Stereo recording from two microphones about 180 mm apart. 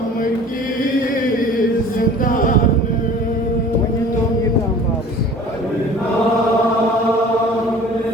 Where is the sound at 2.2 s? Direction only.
50° left (ahead or behind).